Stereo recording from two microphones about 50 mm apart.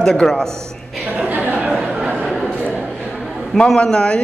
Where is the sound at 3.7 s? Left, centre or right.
Centre.